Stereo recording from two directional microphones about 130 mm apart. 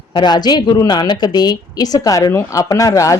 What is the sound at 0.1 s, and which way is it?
Speech, 35° left (ahead or behind).